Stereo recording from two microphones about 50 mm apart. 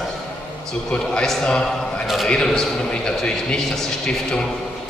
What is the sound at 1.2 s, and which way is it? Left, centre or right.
A man's voice, centre.